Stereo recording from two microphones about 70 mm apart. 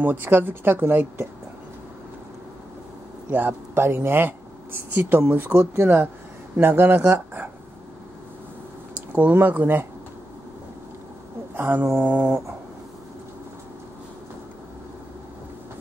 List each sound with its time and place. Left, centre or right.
0.0 s speech: right
3.3 s speech: right
9.1 s speech: right
11.5 s speech: right